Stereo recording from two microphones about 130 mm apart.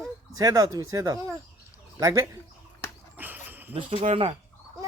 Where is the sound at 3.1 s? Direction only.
15° right (ahead or behind).